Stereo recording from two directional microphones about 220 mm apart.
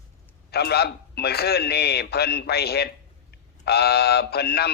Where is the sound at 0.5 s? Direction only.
45° left (ahead or behind).